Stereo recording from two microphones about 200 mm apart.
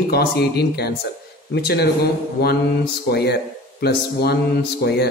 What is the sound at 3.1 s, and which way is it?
A man's voice, 55° left (ahead or behind).